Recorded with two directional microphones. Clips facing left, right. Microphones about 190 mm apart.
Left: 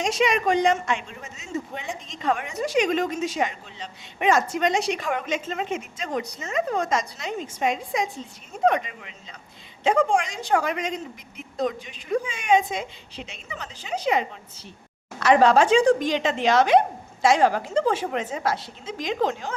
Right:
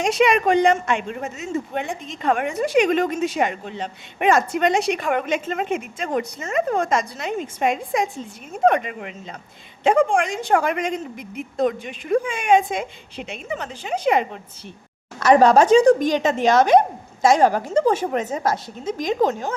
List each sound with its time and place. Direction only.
0.0 s a man's voice: 60° right (ahead or behind)
15.2 s a woman's voice: 45° right (ahead or behind)